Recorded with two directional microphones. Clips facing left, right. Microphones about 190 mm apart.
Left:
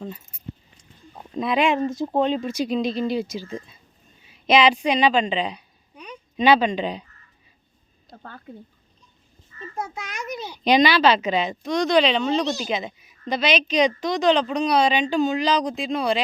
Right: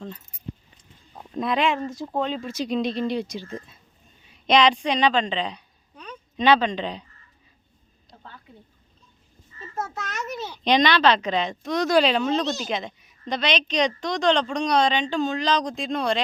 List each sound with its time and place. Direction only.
1.2 s a sound: centre (ahead or behind)
1.6 s speech: 20° left (ahead or behind)
2.6 s a woman's voice: centre (ahead or behind)
8.2 s a woman's voice: 50° left (ahead or behind)
9.7 s a child's voice: 10° left (ahead or behind)